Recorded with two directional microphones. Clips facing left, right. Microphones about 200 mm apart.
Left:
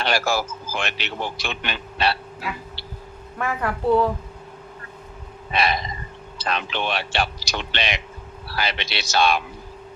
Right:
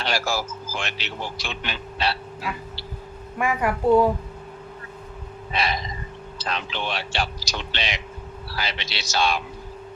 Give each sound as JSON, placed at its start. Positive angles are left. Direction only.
{"t": 0.0, "sound": "a man's voice", "side_deg": 60}
{"t": 2.4, "sound": "speech", "side_deg": 0}
{"t": 3.3, "sound": "a woman's voice", "side_deg": -10}
{"t": 5.5, "sound": "a sound", "side_deg": 60}
{"t": 6.4, "sound": "a man's voice", "side_deg": 60}